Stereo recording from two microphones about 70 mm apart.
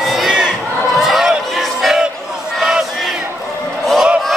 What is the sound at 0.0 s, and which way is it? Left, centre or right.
Crowd, centre.